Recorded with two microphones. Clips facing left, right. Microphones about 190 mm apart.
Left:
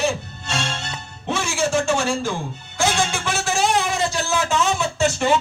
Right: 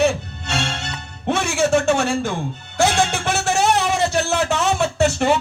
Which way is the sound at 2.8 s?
60° right (ahead or behind).